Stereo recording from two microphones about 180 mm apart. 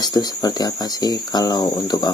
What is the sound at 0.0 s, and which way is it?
Speech, 20° left (ahead or behind).